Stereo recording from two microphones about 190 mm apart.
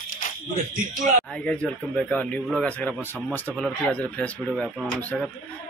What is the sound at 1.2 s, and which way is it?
Speech, 5° left (ahead or behind).